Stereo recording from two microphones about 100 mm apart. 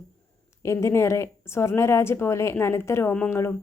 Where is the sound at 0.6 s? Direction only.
30° left (ahead or behind).